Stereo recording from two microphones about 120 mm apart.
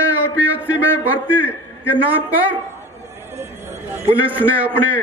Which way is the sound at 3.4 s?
20° right (ahead or behind).